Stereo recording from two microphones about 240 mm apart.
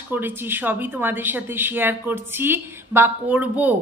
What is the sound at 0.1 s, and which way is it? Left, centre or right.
Speech, centre.